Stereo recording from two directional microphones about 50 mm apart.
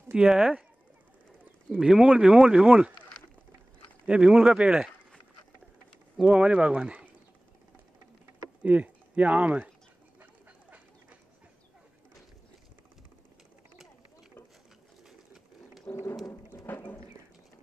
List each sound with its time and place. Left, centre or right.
0.1 s speech: centre
1.8 s speech: centre
4.0 s speech: centre
6.1 s speech: centre
8.6 s speech: right
15.0 s pigeon: centre
15.9 s bird: left
16.6 s a sound: left